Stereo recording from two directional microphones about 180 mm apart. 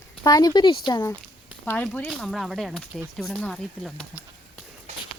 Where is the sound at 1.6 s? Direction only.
5° left (ahead or behind).